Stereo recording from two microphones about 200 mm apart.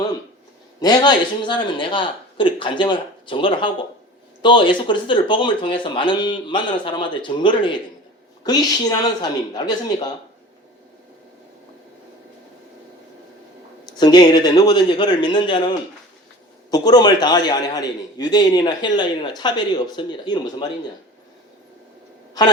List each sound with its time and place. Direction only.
0.8 s a man's voice: 20° left (ahead or behind)
14.0 s a man's voice: 20° left (ahead or behind)
16.7 s a man's voice: 20° left (ahead or behind)